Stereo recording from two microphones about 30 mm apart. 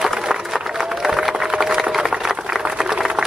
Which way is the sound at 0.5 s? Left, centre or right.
Centre.